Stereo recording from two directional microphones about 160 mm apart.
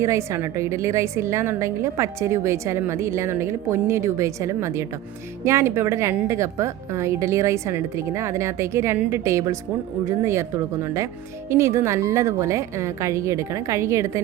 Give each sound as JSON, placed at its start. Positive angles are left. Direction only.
{"t": 0.0, "sound": "a woman's voice", "side_deg": -20}